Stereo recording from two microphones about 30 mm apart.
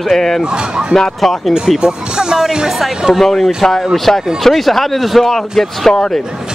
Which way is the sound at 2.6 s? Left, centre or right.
Centre.